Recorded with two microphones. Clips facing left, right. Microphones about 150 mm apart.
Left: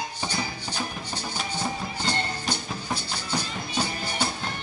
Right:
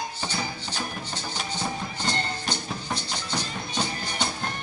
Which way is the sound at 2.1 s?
10° left (ahead or behind).